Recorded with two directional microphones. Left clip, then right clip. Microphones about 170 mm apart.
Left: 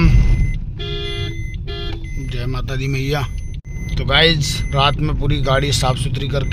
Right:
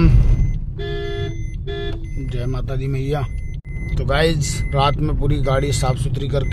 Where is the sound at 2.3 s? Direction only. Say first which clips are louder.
Left 1 dB; 20° right (ahead or behind).